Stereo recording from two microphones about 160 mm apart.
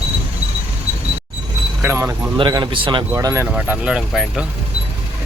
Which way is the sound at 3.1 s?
20° right (ahead or behind).